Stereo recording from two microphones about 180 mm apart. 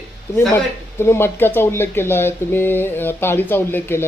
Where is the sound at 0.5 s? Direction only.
15° left (ahead or behind).